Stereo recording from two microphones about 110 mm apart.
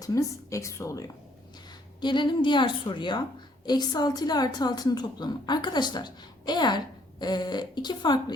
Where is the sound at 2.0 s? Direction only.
45° left (ahead or behind).